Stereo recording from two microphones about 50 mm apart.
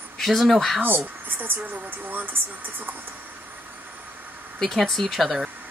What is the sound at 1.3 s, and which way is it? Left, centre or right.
Speech, right.